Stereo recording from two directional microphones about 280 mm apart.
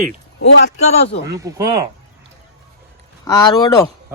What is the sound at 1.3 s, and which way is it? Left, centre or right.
Speech, centre.